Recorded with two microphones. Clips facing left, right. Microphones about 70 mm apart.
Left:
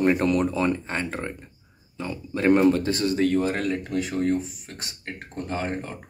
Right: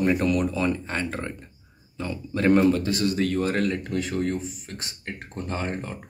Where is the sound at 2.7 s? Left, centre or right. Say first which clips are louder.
Left 1 dB; left; by 5.9 s centre.